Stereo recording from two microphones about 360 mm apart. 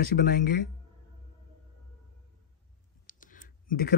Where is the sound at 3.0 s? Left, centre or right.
Left.